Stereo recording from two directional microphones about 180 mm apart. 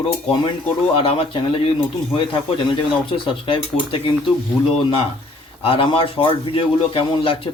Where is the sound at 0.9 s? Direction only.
30° left (ahead or behind).